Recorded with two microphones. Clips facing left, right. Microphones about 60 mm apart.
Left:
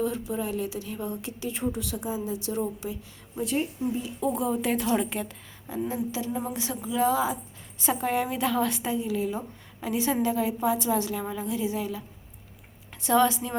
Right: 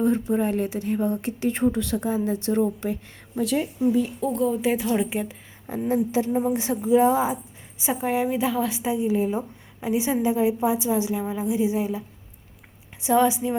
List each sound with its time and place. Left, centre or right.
0.0 s speech: right
3.3 s speech: right
4.2 s speech: centre
4.6 s a woman's voice: centre
5.9 s a woman's voice: right
7.8 s a woman's voice: centre
8.9 s a woman's voice: right
9.8 s a woman's voice: centre